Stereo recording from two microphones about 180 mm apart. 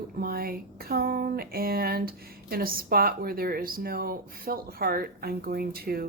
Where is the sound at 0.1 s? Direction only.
55° right (ahead or behind).